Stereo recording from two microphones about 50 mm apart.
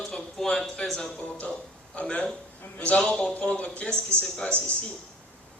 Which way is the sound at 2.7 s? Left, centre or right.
Left.